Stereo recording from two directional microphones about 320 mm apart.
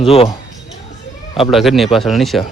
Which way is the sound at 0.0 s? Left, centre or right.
Centre.